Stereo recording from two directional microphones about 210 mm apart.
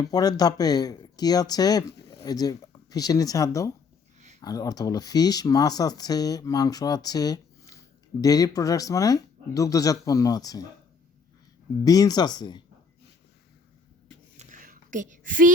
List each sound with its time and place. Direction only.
0.1 s speech: 20° left (ahead or behind)
11.9 s speech: 20° left (ahead or behind)
14.3 s a sound: 40° right (ahead or behind)